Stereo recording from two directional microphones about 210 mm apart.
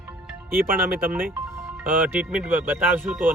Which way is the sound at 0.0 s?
10° right (ahead or behind).